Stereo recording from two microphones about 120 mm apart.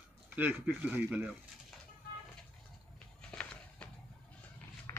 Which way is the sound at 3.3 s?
10° left (ahead or behind).